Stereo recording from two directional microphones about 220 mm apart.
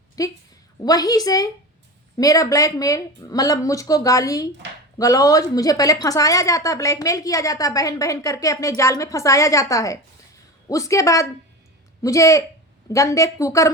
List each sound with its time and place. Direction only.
0.2 s a woman's voice: 15° left (ahead or behind)